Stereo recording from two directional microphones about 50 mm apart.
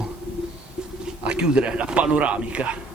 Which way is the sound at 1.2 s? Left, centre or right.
Centre.